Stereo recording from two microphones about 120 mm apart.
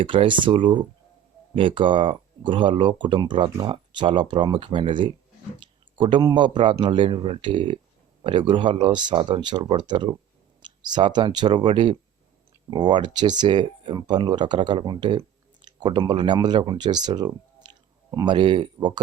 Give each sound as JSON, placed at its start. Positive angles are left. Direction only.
{"t": 0.0, "sound": "speech", "side_deg": -45}